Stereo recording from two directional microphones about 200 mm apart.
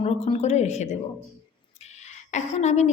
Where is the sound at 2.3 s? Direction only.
35° left (ahead or behind).